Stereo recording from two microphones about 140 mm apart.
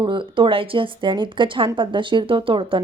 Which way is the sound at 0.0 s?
35° right (ahead or behind).